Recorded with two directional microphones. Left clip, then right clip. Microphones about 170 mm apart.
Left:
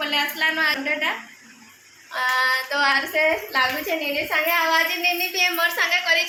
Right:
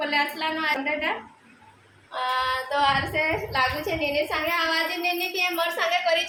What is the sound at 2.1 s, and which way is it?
A woman's voice, 5° left (ahead or behind).